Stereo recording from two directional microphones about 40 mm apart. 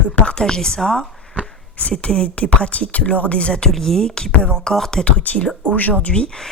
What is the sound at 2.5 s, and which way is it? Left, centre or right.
Speech, left.